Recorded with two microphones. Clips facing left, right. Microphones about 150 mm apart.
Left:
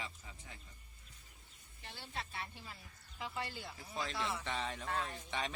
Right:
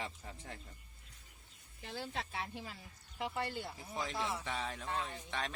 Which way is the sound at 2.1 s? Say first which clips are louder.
Left 1 dB; 90° right.